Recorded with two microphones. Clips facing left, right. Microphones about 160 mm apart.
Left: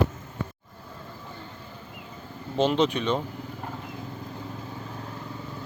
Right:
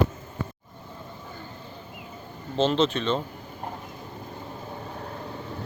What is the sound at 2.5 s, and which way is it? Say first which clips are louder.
Speech: even; 10° left (ahead or behind).